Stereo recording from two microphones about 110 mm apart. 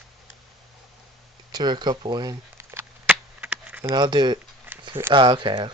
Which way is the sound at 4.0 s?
40° right (ahead or behind).